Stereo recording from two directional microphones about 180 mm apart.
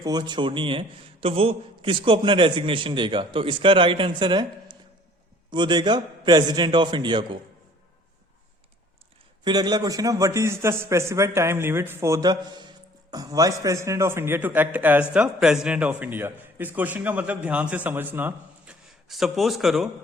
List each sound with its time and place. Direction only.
0.0 s a man's voice: 25° right (ahead or behind)
9.4 s a man's voice: 25° right (ahead or behind); by 19.9 s centre (ahead or behind)